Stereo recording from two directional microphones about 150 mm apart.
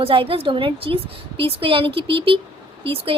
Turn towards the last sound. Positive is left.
turn(degrees=-35)  # may be behind; listen again after turning